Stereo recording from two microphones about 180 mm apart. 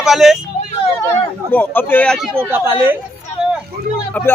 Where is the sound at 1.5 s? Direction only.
10° left (ahead or behind).